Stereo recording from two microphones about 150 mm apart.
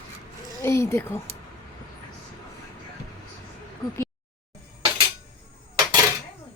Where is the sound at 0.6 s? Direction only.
20° left (ahead or behind).